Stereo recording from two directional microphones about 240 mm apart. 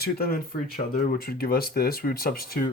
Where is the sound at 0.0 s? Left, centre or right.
Left.